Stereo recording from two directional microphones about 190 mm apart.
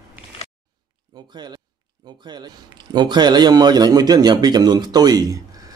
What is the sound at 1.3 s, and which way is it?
Speech, 20° right (ahead or behind).